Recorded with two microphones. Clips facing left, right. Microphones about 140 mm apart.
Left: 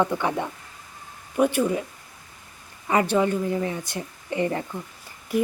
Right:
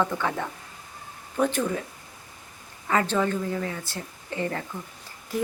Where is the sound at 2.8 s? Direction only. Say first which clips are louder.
Left 3 dB; 15° left (ahead or behind).